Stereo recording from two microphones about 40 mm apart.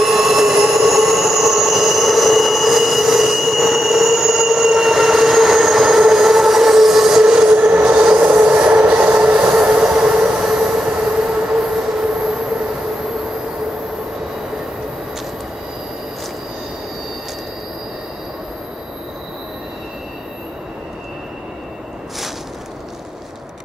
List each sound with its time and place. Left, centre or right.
0.0 s train: centre
7.5 s train: right
9.6 s train: right